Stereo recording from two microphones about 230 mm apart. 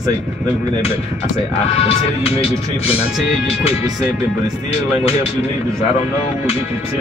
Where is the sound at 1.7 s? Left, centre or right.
Left.